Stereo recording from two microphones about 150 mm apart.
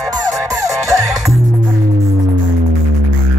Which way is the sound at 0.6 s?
20° right (ahead or behind).